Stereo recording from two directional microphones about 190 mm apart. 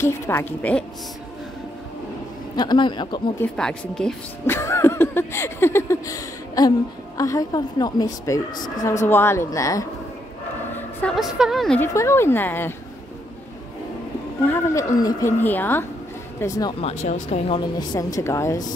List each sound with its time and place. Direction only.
0.0 s a woman's voice: 10° left (ahead or behind)
2.5 s a woman's voice: 20° left (ahead or behind)
3.3 s speech: 5° left (ahead or behind)
4.6 s a sound: 15° left (ahead or behind)
7.2 s a woman's voice: 15° left (ahead or behind)
10.7 s a woman's voice: 5° left (ahead or behind)
11.9 s a woman's voice: 15° left (ahead or behind)
14.4 s a woman's voice: 10° left (ahead or behind)
17.0 s speech: 35° left (ahead or behind)
17.6 s a woman's voice: 20° left (ahead or behind)